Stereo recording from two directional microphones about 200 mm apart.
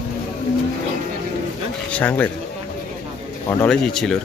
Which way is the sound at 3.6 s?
5° left (ahead or behind).